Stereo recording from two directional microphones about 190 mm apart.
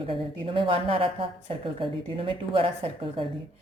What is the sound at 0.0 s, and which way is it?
A woman's voice, 30° right (ahead or behind).